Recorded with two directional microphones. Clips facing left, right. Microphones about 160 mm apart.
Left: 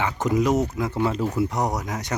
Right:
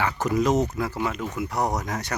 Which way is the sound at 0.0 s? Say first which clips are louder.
Left 1 dB; 20° left (ahead or behind).